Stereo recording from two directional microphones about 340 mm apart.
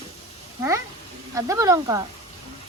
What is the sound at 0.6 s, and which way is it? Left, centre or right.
Speech, centre.